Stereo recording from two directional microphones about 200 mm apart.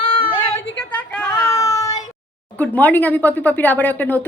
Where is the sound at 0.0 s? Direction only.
45° left (ahead or behind).